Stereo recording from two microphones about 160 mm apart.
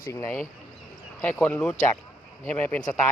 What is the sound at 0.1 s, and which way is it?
Speech, 15° left (ahead or behind).